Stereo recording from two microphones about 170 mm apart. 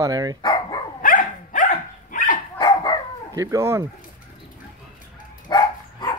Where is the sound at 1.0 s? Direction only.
55° left (ahead or behind).